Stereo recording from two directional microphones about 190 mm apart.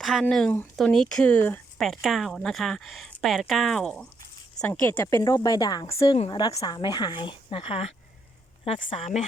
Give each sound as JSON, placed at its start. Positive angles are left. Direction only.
{"t": 0.0, "sound": "a woman's voice", "side_deg": 0}